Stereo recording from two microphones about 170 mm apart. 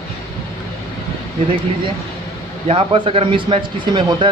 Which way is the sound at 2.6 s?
30° right (ahead or behind).